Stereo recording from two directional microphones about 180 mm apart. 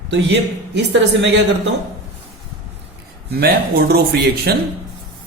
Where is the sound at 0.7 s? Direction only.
75° right (ahead or behind).